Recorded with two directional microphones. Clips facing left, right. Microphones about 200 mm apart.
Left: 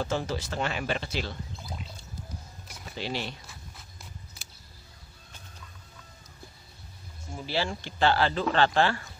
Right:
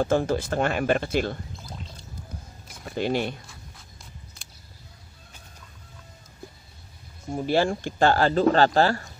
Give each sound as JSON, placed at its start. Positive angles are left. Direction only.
{"t": 0.0, "sound": "speech", "side_deg": -50}
{"t": 2.8, "sound": "speech", "side_deg": -50}
{"t": 7.2, "sound": "speech", "side_deg": -50}